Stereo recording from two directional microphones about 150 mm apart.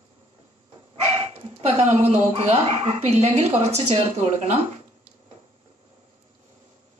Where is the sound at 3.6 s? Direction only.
45° right (ahead or behind).